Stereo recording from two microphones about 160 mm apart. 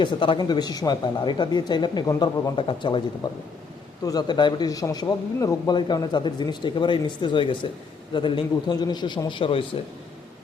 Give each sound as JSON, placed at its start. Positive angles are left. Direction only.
{"t": 0.0, "sound": "speech", "side_deg": 30}